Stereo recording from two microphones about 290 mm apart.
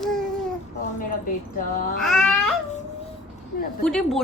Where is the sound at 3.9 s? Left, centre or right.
Centre.